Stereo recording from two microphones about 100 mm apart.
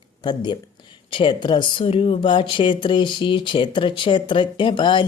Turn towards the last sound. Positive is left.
turn(degrees=55)  # may be behind; listen again after turning